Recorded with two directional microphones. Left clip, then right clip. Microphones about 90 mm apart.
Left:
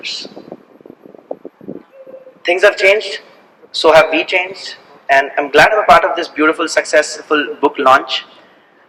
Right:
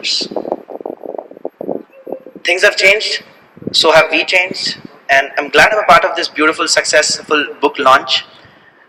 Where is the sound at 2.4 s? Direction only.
25° right (ahead or behind).